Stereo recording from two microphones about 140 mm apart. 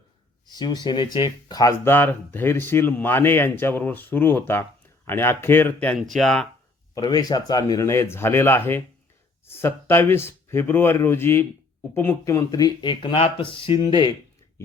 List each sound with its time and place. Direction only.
0.5 s speech: 30° left (ahead or behind)
1.8 s speech: 15° left (ahead or behind)
6.9 s speech: 25° left (ahead or behind)